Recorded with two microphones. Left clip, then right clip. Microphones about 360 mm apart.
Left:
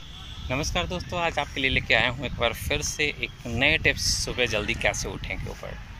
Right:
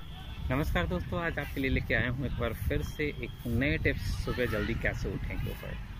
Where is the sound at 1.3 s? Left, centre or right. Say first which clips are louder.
Left 8 dB; left.